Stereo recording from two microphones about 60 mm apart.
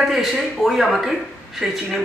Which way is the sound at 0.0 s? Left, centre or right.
Centre.